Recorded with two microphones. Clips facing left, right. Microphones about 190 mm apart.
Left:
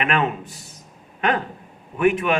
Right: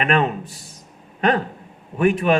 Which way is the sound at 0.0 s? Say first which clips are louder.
Right 3 dB; 35° right (ahead or behind).